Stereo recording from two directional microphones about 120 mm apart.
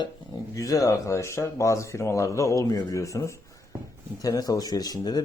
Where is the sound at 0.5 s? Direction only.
30° left (ahead or behind).